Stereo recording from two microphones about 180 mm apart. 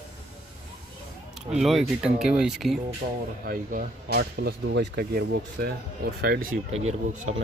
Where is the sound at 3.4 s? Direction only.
50° right (ahead or behind).